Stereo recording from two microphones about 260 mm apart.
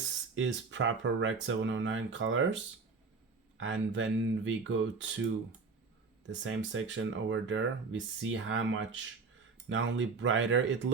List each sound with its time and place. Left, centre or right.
0.3 s speech: right
3.6 s speech: right
6.2 s speech: right